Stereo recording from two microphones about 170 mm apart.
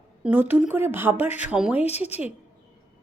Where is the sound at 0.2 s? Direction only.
10° right (ahead or behind).